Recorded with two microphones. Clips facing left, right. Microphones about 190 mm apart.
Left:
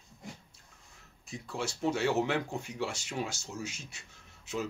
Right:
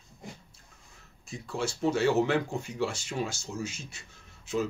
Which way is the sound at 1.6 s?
15° left (ahead or behind).